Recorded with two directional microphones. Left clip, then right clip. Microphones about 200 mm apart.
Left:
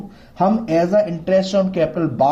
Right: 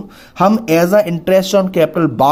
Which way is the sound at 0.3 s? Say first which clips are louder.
Right 5 dB; 40° right (ahead or behind).